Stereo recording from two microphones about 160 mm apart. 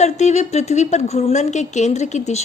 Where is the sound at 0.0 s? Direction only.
45° left (ahead or behind).